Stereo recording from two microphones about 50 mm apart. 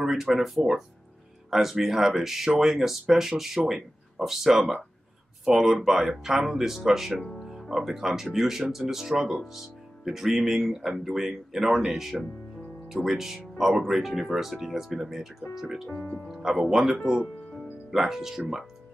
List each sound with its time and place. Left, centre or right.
0.0 s speech: centre
1.5 s speech: centre
15.9 s speech: left
16.3 s speech: centre